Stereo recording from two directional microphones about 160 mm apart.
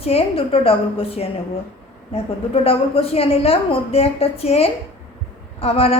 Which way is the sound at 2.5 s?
35° left (ahead or behind).